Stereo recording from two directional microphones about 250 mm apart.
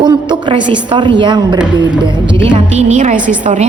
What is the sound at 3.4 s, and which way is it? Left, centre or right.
Speech, right.